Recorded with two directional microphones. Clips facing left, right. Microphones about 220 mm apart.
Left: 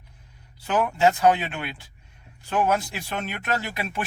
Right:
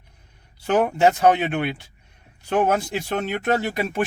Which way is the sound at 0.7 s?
45° right (ahead or behind).